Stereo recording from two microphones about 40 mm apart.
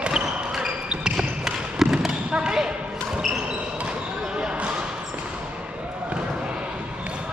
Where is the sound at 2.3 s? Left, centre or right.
Right.